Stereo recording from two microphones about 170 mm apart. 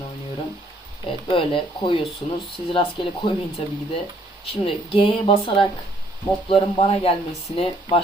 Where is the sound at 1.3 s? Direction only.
30° left (ahead or behind).